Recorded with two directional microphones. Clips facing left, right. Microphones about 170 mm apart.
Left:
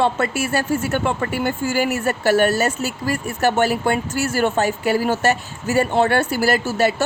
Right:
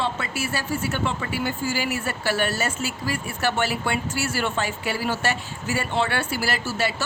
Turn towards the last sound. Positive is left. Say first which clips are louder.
# left 8 dB
turn(degrees=50)  # may be behind; listen again after turning